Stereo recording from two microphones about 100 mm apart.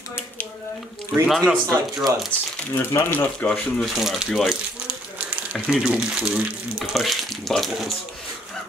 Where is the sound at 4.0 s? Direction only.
5° right (ahead or behind).